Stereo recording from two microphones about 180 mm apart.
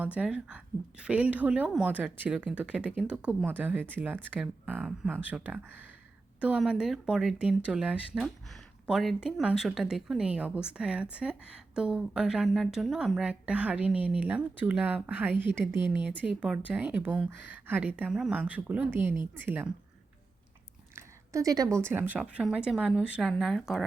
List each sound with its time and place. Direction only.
0.0 s a woman's voice: 10° right (ahead or behind)
20.9 s a sound: 20° right (ahead or behind)
21.8 s a woman's voice: 10° right (ahead or behind)